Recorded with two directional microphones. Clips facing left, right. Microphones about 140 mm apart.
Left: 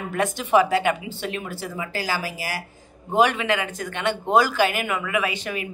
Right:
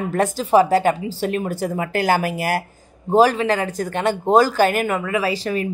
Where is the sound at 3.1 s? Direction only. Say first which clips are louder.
Right 5 dB; 35° right (ahead or behind).